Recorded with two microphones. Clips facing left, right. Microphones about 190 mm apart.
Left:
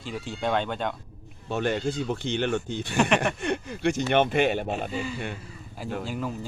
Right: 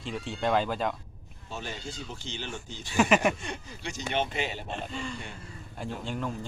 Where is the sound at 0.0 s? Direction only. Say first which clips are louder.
Left 1 dB; centre (ahead or behind).